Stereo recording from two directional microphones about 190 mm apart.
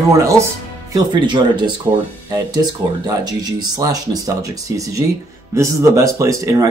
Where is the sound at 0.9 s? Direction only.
25° right (ahead or behind).